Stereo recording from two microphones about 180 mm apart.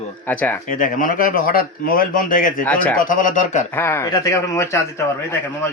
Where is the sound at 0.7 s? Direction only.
50° left (ahead or behind).